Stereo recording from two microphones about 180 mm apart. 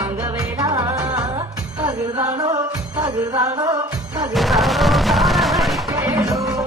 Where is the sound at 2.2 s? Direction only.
20° right (ahead or behind).